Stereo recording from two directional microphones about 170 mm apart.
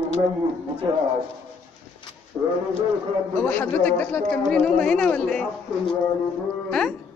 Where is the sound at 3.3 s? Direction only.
10° left (ahead or behind).